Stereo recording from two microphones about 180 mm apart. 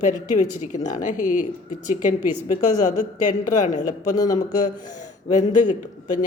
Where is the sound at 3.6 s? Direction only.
45° left (ahead or behind).